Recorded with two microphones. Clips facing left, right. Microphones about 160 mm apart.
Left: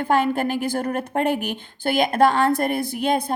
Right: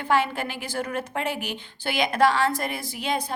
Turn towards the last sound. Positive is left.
turn(degrees=50)  # may be behind; listen again after turning